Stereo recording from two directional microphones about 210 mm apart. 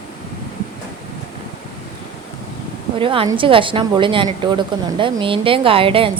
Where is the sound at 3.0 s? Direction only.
25° right (ahead or behind).